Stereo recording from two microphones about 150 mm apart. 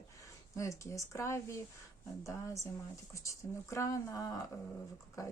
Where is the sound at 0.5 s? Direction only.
20° left (ahead or behind).